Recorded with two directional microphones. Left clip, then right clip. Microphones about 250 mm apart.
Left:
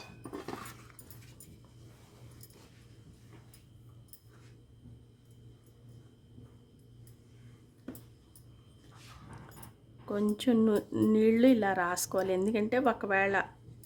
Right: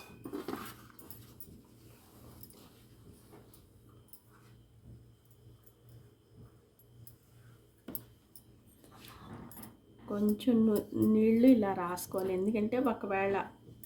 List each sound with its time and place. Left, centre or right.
0.5 s dog: centre
10.1 s speech: left